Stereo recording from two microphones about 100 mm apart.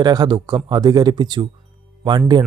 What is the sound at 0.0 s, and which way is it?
Speech, 45° right (ahead or behind).